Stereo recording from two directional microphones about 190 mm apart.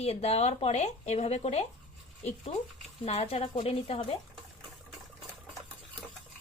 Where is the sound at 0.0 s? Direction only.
35° left (ahead or behind).